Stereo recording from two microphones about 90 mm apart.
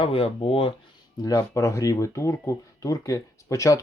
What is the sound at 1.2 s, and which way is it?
Speech, 40° left (ahead or behind).